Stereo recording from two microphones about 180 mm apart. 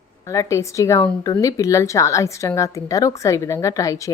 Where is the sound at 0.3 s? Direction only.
15° left (ahead or behind).